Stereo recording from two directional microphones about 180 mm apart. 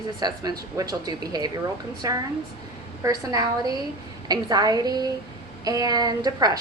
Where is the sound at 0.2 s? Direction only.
20° right (ahead or behind).